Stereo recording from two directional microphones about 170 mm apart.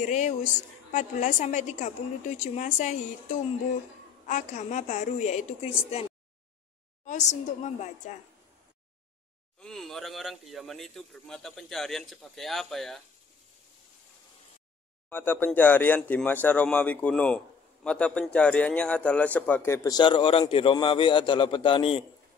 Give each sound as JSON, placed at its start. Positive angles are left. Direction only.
{"t": 0.0, "sound": "a woman's voice", "side_deg": 45}
{"t": 4.3, "sound": "a woman's voice", "side_deg": 45}
{"t": 7.1, "sound": "a sound", "side_deg": 45}
{"t": 7.8, "sound": "a woman's voice", "side_deg": 45}
{"t": 9.6, "sound": "speech", "side_deg": 5}
{"t": 15.0, "sound": "speech", "side_deg": 10}